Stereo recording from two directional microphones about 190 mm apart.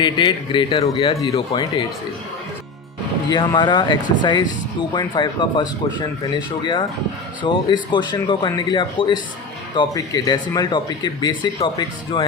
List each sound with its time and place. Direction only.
0.0 s speech: 25° left (ahead or behind)
3.2 s speech: 25° left (ahead or behind)